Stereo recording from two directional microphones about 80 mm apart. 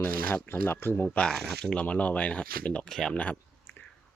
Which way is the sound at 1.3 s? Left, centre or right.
Centre.